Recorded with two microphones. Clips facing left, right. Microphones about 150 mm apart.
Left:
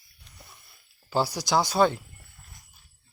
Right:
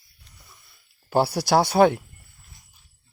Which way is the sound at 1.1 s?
60° right (ahead or behind).